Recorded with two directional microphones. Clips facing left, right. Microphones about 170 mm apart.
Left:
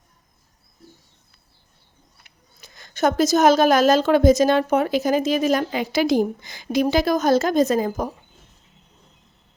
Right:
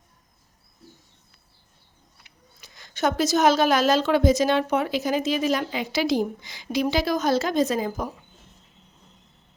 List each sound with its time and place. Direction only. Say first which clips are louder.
2.2 s speech: left 1 dB; 45° left (ahead or behind)